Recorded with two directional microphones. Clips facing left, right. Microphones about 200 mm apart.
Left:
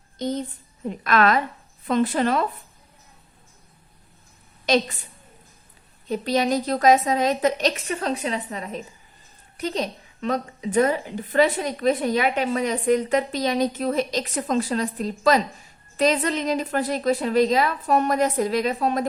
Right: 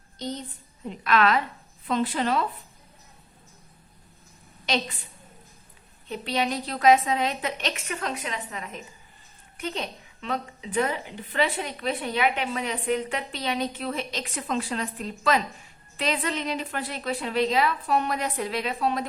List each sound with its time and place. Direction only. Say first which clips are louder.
0.9 s a woman's voice: left 3 dB; 45° left (ahead or behind)
6.1 s a woman's voice: left 6 dB; 40° left (ahead or behind)